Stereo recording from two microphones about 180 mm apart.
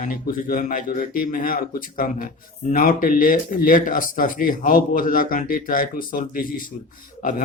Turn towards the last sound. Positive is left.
turn(degrees=50)  # may be behind; listen again after turning